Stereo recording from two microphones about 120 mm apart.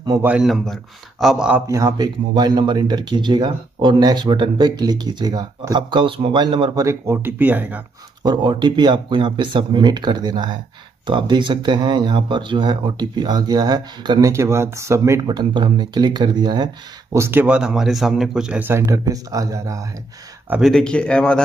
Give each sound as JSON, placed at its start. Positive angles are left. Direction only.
{"t": 0.4, "sound": "speech", "side_deg": 0}
{"t": 1.7, "sound": "speech", "side_deg": -30}
{"t": 6.8, "sound": "speech", "side_deg": -25}
{"t": 8.2, "sound": "speech", "side_deg": -40}
{"t": 14.3, "sound": "speech", "side_deg": -25}
{"t": 15.3, "sound": "speech", "side_deg": -40}
{"t": 17.1, "sound": "speech", "side_deg": -20}
{"t": 20.6, "sound": "speech", "side_deg": 5}